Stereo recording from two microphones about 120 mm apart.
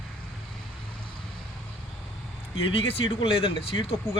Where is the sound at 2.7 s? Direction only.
50° left (ahead or behind).